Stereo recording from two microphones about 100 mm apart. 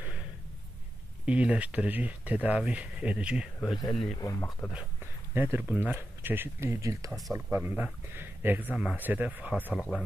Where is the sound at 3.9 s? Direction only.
5° left (ahead or behind).